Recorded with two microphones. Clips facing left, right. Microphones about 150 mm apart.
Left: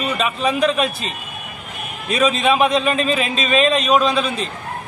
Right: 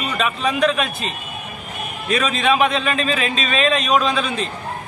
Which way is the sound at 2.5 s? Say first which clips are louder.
Left 2 dB; centre (ahead or behind).